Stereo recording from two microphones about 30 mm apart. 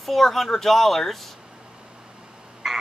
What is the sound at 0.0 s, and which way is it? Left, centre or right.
Speech, centre.